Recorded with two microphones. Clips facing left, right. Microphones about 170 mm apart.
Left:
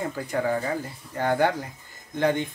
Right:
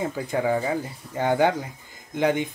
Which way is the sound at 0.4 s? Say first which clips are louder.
Right 2 dB; 10° right (ahead or behind).